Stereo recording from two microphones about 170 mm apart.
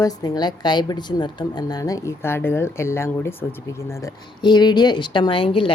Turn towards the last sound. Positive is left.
turn(degrees=30)  # may be behind; listen again after turning